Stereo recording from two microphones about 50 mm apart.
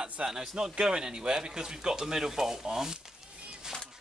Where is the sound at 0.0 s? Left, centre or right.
Centre.